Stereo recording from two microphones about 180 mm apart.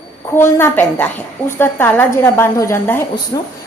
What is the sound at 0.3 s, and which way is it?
A woman's voice, 10° left (ahead or behind).